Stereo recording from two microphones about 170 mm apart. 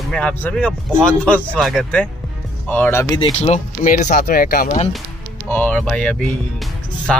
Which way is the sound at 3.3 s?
40° left (ahead or behind).